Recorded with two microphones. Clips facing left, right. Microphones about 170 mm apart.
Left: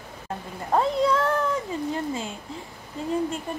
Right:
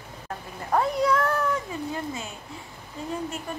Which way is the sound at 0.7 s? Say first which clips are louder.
Left 1 dB; 25° left (ahead or behind).